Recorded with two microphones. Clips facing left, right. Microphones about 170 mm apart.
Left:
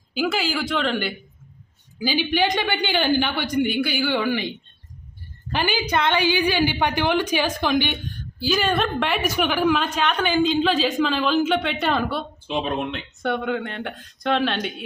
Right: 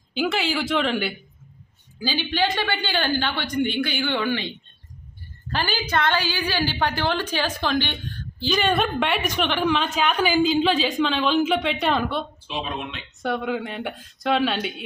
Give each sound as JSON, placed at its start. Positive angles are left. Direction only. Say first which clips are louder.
{"t": 0.1, "sound": "a woman's voice", "louder": "even", "side_deg": 0}
{"t": 2.0, "sound": "a woman's voice", "louder": "left 3 dB", "side_deg": 15}
{"t": 12.5, "sound": "speech", "louder": "left 5 dB", "side_deg": 50}
{"t": 13.2, "sound": "a woman's voice", "louder": "left 1 dB", "side_deg": 0}